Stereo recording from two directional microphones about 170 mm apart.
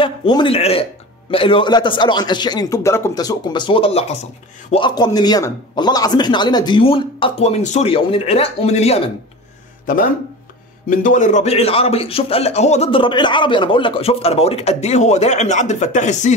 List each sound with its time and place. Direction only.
0.0 s a man's voice: 30° left (ahead or behind)
10.9 s a man's voice: 50° left (ahead or behind)